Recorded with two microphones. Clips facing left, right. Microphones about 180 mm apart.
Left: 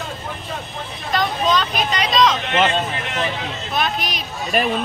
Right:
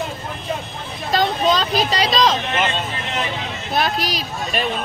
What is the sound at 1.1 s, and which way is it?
Speech, 35° right (ahead or behind).